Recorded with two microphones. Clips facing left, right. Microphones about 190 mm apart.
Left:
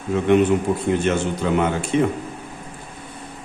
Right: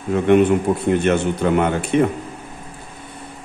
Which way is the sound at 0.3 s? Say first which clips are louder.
Right 2 dB; 55° right (ahead or behind).